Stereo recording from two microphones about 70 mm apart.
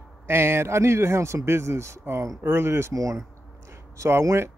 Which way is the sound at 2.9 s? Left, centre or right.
Right.